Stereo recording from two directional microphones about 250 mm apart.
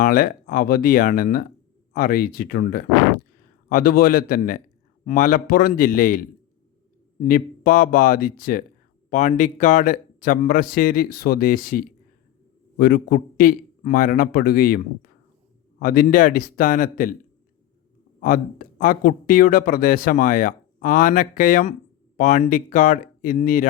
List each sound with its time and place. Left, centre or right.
0.0 s speech: left
18.2 s speech: left